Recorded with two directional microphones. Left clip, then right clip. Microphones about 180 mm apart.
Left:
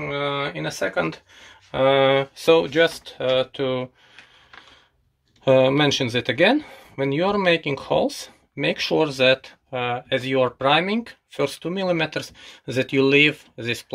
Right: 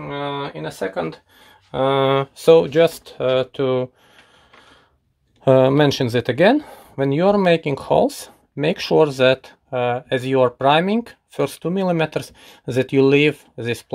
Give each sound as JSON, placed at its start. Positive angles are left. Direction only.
{"t": 0.4, "sound": "speech", "side_deg": -55}
{"t": 5.4, "sound": "speech", "side_deg": -55}